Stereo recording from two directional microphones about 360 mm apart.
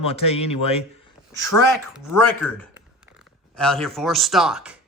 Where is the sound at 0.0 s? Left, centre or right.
Centre.